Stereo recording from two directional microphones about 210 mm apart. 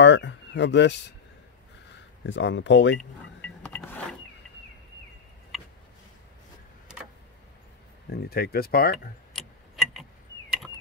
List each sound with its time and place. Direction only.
0.0 s speech: 60° left (ahead or behind)
2.2 s speech: 60° left (ahead or behind)
3.0 s a sound: 5° left (ahead or behind)
8.1 s speech: 45° left (ahead or behind)
9.3 s tick-tock: centre (ahead or behind)